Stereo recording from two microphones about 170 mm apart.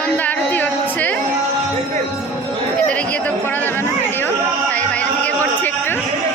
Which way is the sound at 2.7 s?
5° left (ahead or behind).